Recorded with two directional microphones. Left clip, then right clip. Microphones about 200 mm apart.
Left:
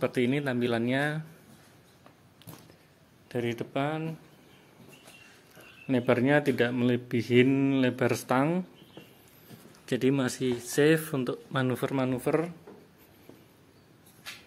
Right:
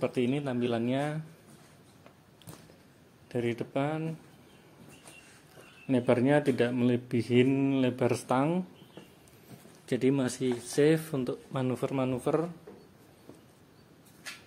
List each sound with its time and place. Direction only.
0.0 s speech: 10° left (ahead or behind)
3.3 s speech: centre (ahead or behind)
5.9 s speech: centre (ahead or behind)
9.8 s speech: 5° left (ahead or behind)